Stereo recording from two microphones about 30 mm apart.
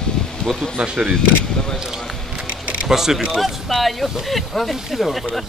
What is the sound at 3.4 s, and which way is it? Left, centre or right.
Speech, centre.